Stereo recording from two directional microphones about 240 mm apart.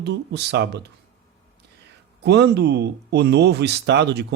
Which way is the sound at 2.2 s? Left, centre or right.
Right.